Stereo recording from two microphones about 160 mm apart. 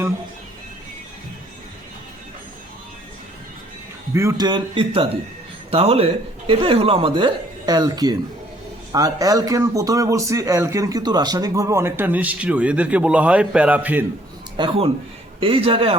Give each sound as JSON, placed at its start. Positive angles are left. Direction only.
{"t": 4.1, "sound": "a man's voice", "side_deg": -20}
{"t": 14.5, "sound": "speech", "side_deg": -30}